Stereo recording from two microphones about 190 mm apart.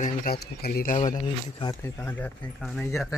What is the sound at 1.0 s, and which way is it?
Speech, 25° left (ahead or behind).